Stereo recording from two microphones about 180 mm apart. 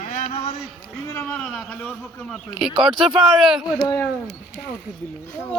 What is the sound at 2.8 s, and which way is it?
Speech, centre (ahead or behind).